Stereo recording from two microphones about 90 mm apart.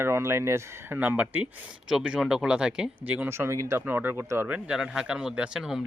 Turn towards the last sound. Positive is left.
turn(degrees=-5)  # may be behind; listen again after turning